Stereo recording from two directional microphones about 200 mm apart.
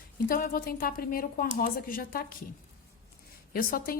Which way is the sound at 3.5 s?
45° left (ahead or behind).